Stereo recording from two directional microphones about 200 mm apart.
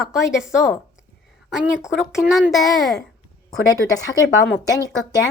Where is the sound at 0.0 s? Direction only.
Centre (ahead or behind).